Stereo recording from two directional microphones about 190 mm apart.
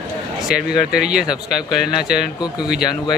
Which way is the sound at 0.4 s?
Centre (ahead or behind).